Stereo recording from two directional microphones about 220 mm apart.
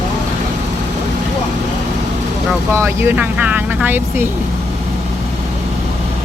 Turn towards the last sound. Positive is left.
turn(degrees=-10)  # may be behind; listen again after turning